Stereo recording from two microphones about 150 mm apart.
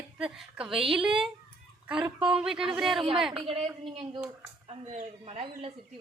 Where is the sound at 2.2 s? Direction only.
5° right (ahead or behind).